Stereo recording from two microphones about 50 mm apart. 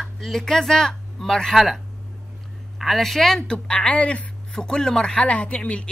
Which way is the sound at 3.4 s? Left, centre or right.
Centre.